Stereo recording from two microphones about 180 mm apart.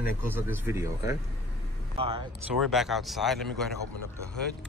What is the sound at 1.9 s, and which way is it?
Speech, 30° right (ahead or behind).